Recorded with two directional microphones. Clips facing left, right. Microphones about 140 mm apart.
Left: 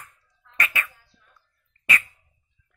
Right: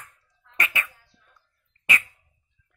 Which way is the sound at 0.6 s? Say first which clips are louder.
Left 1 dB; 20° right (ahead or behind).